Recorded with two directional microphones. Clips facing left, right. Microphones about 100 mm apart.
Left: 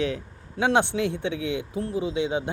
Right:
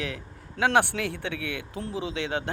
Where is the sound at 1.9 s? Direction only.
70° right (ahead or behind).